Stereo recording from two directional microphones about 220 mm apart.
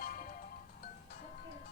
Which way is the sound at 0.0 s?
40° left (ahead or behind).